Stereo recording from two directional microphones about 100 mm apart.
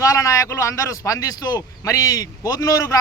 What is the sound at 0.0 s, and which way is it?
A man's voice, 35° left (ahead or behind).